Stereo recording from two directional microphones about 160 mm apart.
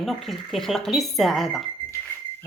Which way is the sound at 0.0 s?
Centre (ahead or behind).